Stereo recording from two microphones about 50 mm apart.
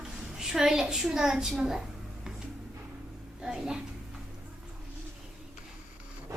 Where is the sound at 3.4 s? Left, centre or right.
Centre.